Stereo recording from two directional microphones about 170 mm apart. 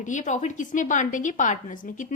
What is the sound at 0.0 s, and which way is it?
A woman's voice, 45° left (ahead or behind).